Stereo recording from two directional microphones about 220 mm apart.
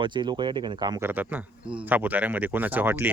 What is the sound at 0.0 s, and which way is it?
Speech, 20° right (ahead or behind).